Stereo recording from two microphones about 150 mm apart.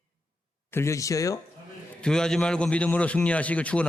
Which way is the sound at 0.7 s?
20° left (ahead or behind).